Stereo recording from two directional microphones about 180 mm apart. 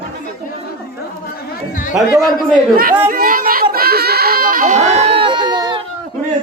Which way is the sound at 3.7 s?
60° right (ahead or behind).